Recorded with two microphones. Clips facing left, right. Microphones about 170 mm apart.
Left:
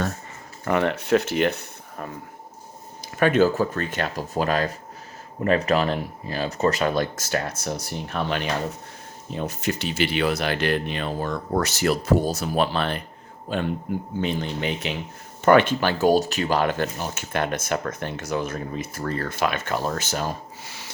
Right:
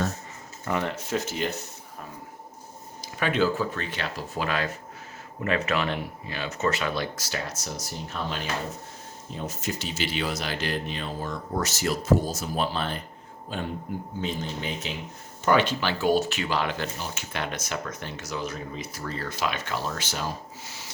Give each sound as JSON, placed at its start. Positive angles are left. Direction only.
{"t": 0.6, "sound": "speech", "side_deg": 65}
{"t": 3.0, "sound": "speech", "side_deg": 50}
{"t": 15.4, "sound": "speech", "side_deg": 55}